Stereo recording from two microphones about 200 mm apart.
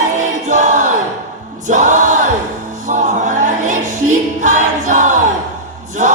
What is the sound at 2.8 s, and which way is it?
Music, 40° right (ahead or behind).